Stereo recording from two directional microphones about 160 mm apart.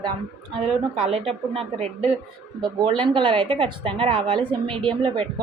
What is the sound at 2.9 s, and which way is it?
A woman's voice, 30° right (ahead or behind).